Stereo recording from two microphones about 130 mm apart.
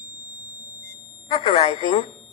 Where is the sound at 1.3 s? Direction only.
55° left (ahead or behind).